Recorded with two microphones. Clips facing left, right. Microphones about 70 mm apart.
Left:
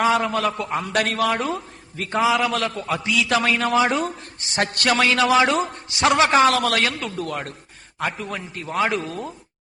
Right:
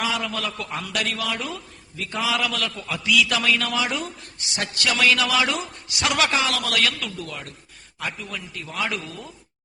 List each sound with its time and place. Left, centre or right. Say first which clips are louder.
0.0 s a man's voice: left 7 dB; left
2.2 s a man's voice: left 5 dB; left
5.0 s a man's voice: left 3 dB; left
6.3 s a man's voice: left 7 dB; left